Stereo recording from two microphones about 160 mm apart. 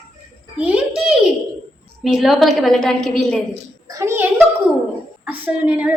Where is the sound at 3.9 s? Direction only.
15° right (ahead or behind).